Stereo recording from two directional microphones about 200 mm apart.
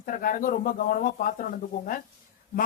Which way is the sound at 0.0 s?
45° left (ahead or behind).